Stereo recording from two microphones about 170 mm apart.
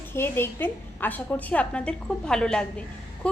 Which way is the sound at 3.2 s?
5° left (ahead or behind).